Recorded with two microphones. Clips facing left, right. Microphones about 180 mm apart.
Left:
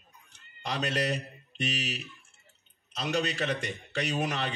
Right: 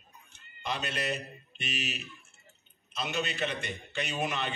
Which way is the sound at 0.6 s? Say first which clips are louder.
Left 3 dB; 90° left.